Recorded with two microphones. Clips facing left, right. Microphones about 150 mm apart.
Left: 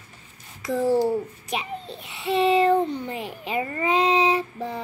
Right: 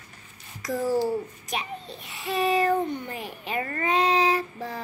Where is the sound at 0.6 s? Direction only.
25° left (ahead or behind).